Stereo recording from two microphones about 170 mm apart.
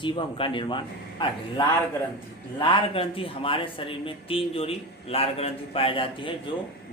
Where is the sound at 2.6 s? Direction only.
30° left (ahead or behind).